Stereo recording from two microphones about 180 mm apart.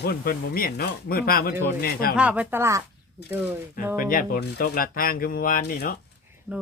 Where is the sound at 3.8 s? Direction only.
50° left (ahead or behind).